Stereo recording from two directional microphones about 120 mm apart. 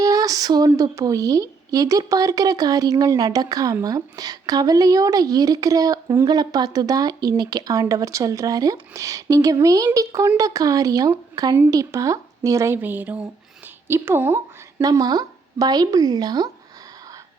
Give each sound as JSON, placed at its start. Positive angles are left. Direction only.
{"t": 0.0, "sound": "speech", "side_deg": -30}
{"t": 14.8, "sound": "speech", "side_deg": -30}